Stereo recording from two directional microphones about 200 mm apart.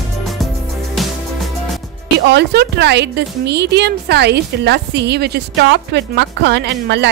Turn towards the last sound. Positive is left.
turn(degrees=-60)  # may be behind; listen again after turning